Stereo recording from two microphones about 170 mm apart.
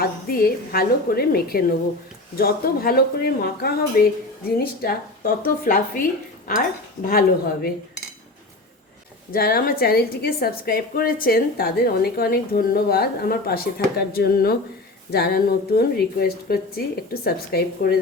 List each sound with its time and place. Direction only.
0.0 s a woman's voice: 60° left (ahead or behind)
7.1 s a woman's voice: 60° left (ahead or behind)
9.3 s a woman's voice: 60° left (ahead or behind)